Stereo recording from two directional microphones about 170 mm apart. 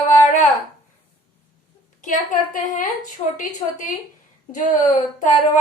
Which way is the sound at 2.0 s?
50° left (ahead or behind).